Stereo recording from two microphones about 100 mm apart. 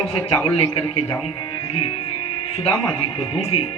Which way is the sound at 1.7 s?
65° left (ahead or behind).